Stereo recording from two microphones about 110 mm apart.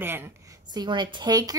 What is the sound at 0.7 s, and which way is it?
Speech, 40° right (ahead or behind).